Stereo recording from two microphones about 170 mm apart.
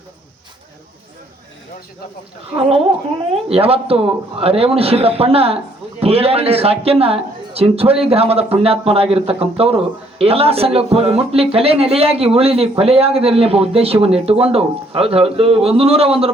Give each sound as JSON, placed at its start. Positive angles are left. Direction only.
{"t": 2.6, "sound": "speech", "side_deg": -35}